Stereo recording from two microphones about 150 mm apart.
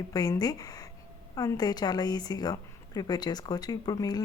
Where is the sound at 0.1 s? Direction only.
25° left (ahead or behind).